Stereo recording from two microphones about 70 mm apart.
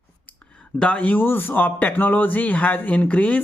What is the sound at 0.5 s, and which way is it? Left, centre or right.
A man's voice, centre.